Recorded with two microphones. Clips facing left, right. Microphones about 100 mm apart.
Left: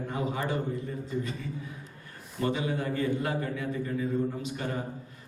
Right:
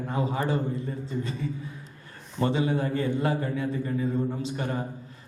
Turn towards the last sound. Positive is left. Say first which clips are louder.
# right 2 dB
turn(degrees=-30)  # may be behind; listen again after turning